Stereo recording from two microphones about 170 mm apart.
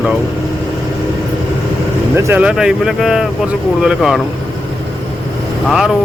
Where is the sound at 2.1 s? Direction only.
15° right (ahead or behind).